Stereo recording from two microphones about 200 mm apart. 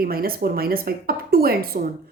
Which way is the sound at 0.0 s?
50° right (ahead or behind).